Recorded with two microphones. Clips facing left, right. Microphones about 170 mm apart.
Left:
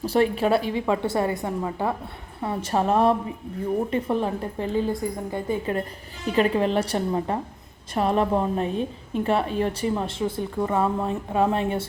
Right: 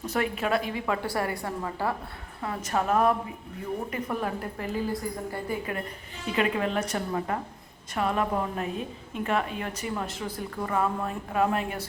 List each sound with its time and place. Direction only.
0.0 s a woman's voice: 30° left (ahead or behind)